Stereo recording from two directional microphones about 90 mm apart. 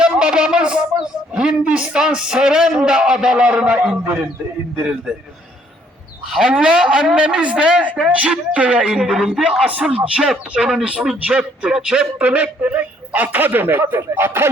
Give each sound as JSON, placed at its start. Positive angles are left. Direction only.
{"t": 0.0, "sound": "speech", "side_deg": -10}
{"t": 6.3, "sound": "speech", "side_deg": -10}